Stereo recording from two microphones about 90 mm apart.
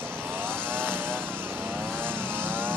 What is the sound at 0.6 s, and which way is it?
Vehicle, 25° right (ahead or behind).